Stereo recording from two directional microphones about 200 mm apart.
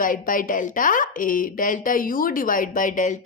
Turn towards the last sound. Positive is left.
turn(degrees=40)  # may be behind; listen again after turning